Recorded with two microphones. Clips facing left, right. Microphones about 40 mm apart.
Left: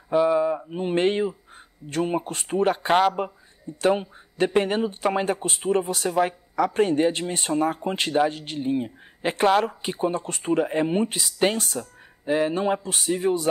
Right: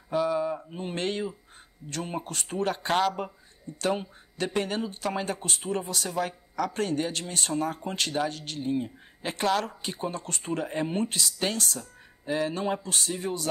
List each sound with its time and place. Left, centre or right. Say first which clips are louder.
0.1 s speech: left 6 dB; left